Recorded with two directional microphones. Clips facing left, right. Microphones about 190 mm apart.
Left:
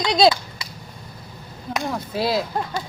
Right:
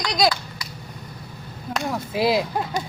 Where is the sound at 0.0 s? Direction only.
25° left (ahead or behind).